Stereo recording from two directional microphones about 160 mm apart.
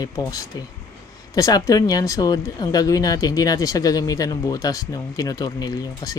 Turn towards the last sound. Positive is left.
turn(degrees=25)  # may be behind; listen again after turning